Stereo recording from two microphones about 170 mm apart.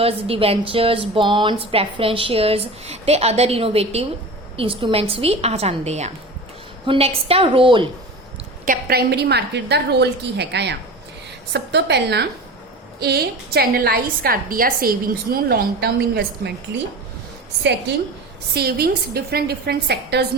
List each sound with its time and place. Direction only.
0.0 s a woman's voice: 35° right (ahead or behind)
8.6 s a woman's voice: 60° right (ahead or behind); by 12.3 s 80° right
13.0 s a woman's voice: 70° right (ahead or behind)
18.5 s a woman's voice: 70° right (ahead or behind)